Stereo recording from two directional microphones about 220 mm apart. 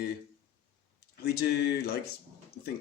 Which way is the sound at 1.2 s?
50° left (ahead or behind).